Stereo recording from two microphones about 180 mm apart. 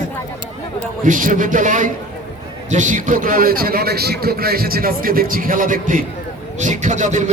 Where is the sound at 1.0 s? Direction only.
45° right (ahead or behind).